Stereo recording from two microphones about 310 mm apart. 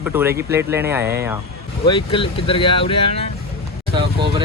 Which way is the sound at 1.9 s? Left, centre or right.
Centre.